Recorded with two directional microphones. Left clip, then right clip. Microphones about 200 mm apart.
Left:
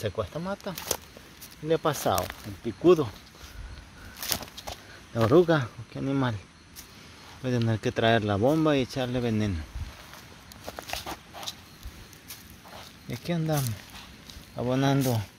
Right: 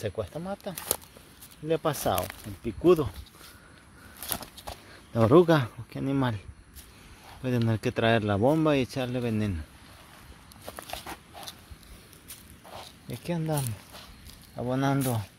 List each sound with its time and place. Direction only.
0.0 s speech: 5° right (ahead or behind)
0.7 s speech: 25° right (ahead or behind)
1.7 s speech: 15° right (ahead or behind)
4.2 s a sound: 5° right (ahead or behind)
5.1 s speech: 30° right (ahead or behind)
7.4 s speech: 15° right (ahead or behind)
10.8 s a sound: 5° right (ahead or behind)
13.1 s speech: 10° right (ahead or behind)